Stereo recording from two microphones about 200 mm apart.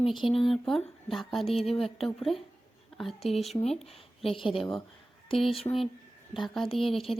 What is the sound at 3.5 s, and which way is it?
Speech, 35° left (ahead or behind).